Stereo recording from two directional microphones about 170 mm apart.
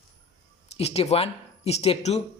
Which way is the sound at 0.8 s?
40° left (ahead or behind).